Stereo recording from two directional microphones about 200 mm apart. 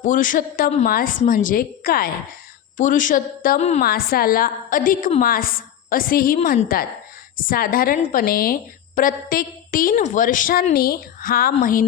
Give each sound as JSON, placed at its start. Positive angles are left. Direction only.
{"t": 0.0, "sound": "a woman's voice", "side_deg": 40}